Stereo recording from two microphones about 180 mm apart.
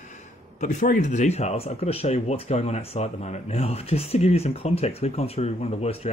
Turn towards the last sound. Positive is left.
turn(degrees=35)  # may be behind; listen again after turning